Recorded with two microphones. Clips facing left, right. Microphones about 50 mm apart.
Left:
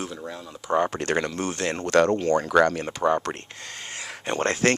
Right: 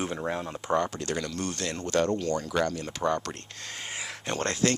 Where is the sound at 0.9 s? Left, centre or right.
Left.